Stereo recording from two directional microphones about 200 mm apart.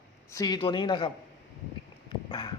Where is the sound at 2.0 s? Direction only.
20° left (ahead or behind).